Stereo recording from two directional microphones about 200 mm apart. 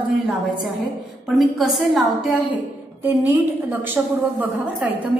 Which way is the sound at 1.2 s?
Centre (ahead or behind).